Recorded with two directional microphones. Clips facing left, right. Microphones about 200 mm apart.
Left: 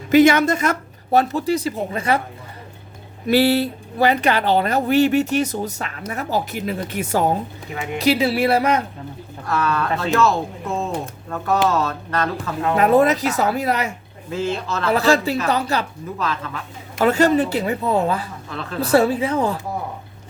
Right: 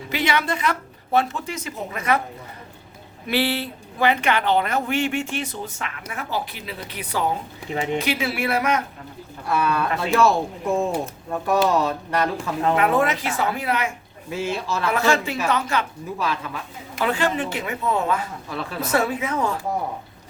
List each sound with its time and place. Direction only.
0.1 s speech: 45° left (ahead or behind)
3.2 s speech: 40° left (ahead or behind)
9.5 s speech: 10° right (ahead or behind)
12.7 s speech: 40° left (ahead or behind)
14.3 s speech: 10° right (ahead or behind)
14.8 s speech: 35° left (ahead or behind)
16.1 s speech: 10° right (ahead or behind)
17.0 s speech: 40° left (ahead or behind)
18.5 s speech: 10° right (ahead or behind)
18.8 s speech: 35° left (ahead or behind)